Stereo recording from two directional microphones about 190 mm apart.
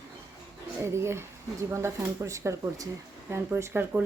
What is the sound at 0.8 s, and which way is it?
A woman's voice, 15° right (ahead or behind).